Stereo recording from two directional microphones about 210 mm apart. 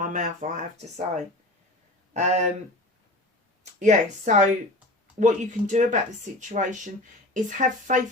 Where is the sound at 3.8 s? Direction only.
35° right (ahead or behind).